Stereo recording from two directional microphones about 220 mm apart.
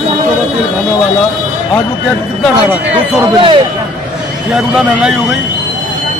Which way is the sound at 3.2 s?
20° right (ahead or behind).